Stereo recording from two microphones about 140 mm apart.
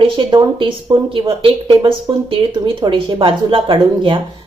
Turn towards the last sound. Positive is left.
turn(degrees=-35)  # may be behind; listen again after turning